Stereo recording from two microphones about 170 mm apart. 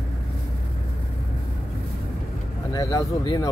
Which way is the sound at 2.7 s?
20° left (ahead or behind).